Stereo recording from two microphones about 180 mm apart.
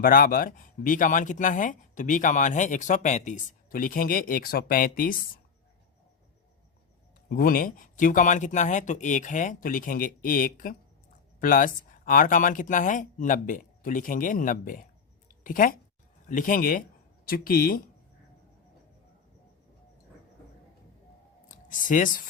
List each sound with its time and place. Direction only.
0.0 s speech: 50° left (ahead or behind)
7.3 s speech: 55° left (ahead or behind)
21.7 s speech: 45° left (ahead or behind)